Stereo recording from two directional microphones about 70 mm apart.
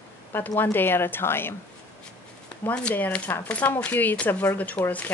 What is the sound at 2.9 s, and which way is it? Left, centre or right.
Speech, left.